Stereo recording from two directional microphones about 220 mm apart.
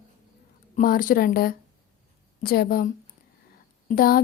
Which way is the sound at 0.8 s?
40° left (ahead or behind).